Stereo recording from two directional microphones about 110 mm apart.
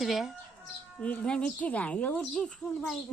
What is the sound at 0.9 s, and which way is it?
A woman's voice, 10° left (ahead or behind).